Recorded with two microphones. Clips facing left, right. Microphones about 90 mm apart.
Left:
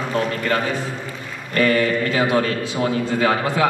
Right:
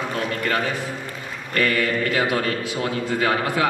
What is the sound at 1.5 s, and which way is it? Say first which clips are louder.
A man's voice: left 4 dB; 30° left (ahead or behind).